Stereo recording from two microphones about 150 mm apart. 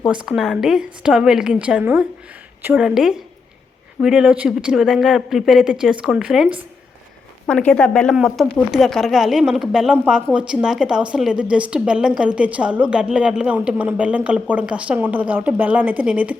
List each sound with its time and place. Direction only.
0.0 s speech: 5° right (ahead or behind)
7.4 s a woman's voice: 5° left (ahead or behind); by 16.4 s 10° right (ahead or behind)